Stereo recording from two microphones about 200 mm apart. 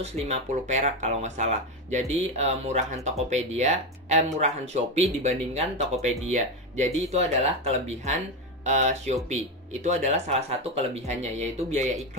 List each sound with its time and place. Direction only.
0.0 s speech: 30° right (ahead or behind)